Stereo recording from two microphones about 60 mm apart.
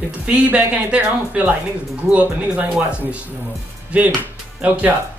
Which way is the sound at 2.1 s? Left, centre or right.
Centre.